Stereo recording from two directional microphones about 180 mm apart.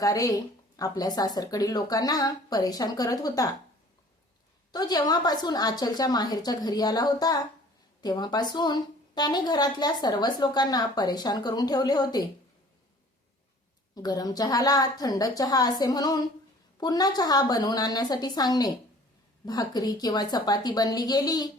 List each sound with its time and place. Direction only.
0.0 s a woman's voice: 20° left (ahead or behind)
4.7 s a woman's voice: 20° left (ahead or behind)
13.9 s a woman's voice: 20° left (ahead or behind)